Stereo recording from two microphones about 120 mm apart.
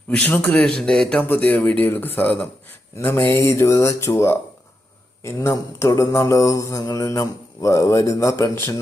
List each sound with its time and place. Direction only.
0.1 s speech: 15° left (ahead or behind)
2.9 s mantra: 20° left (ahead or behind)